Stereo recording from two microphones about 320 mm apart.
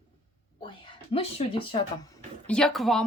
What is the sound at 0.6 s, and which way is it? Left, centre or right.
Speech, centre.